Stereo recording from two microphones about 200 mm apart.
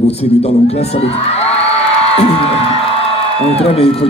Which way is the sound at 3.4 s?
30° left (ahead or behind).